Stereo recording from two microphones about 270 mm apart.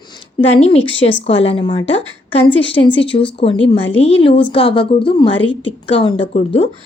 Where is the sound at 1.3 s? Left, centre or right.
Left.